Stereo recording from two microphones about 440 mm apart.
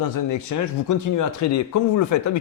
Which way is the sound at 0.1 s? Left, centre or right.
Left.